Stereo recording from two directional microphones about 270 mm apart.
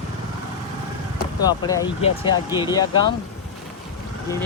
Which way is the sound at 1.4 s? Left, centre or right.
Centre.